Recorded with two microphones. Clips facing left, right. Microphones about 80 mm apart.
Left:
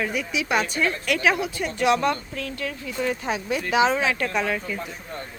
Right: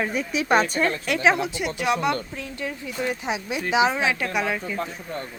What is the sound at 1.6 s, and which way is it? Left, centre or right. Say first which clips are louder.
Speech: left 3 dB; centre.